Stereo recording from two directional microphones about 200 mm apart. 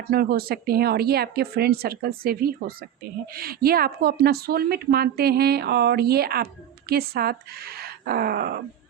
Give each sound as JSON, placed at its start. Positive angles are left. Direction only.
{"t": 0.1, "sound": "speech", "side_deg": -50}